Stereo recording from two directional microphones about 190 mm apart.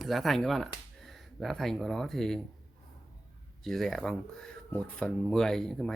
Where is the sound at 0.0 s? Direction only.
Centre (ahead or behind).